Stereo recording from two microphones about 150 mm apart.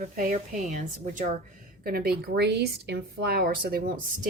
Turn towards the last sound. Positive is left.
turn(degrees=-70)  # may be behind; listen again after turning